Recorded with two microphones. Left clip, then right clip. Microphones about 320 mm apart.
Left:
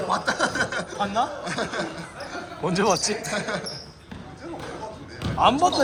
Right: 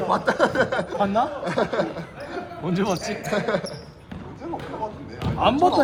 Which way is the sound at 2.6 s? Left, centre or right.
Centre.